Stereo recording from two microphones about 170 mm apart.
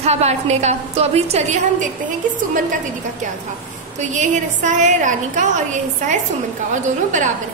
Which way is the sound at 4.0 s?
45° right (ahead or behind).